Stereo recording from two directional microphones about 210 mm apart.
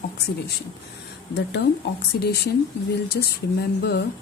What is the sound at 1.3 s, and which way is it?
Speech, 55° left (ahead or behind).